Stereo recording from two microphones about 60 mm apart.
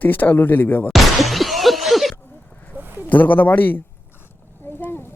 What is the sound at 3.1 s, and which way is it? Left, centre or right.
Speech, left.